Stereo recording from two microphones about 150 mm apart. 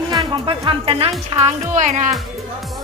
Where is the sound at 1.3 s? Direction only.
50° right (ahead or behind).